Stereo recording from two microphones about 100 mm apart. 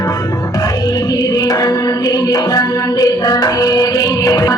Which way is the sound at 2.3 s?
35° left (ahead or behind).